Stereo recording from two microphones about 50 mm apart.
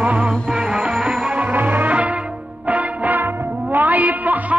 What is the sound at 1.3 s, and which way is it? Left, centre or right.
Music, right.